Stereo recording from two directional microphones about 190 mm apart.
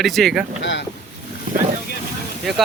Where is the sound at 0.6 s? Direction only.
75° left (ahead or behind).